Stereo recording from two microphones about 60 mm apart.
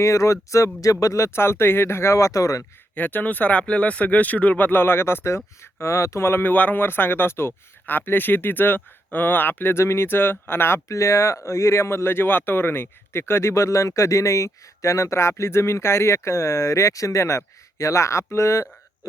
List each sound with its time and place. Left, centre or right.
0.0 s speech: left
2.9 s speech: left
6.5 s speech: left
10.8 s speech: left